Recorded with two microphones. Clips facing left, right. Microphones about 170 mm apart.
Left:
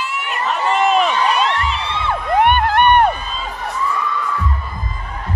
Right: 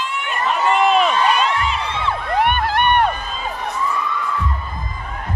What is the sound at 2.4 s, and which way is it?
Music, 55° left (ahead or behind).